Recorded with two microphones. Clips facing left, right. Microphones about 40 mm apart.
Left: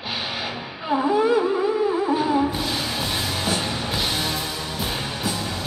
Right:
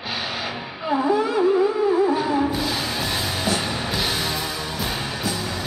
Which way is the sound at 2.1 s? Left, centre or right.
Centre.